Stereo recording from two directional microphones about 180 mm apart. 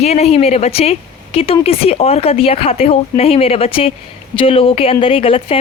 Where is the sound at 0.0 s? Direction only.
35° left (ahead or behind).